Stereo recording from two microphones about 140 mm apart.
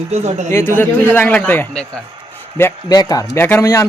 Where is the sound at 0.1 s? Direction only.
50° right (ahead or behind).